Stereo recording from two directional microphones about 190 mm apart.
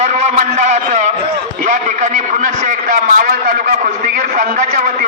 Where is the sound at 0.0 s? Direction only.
40° right (ahead or behind).